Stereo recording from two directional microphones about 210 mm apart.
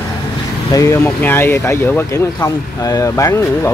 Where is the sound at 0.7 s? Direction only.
15° left (ahead or behind).